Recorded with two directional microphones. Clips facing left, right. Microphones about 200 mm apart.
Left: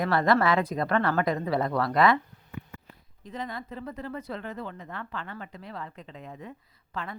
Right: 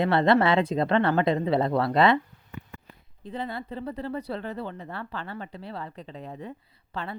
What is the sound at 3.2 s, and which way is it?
Speech, 30° right (ahead or behind).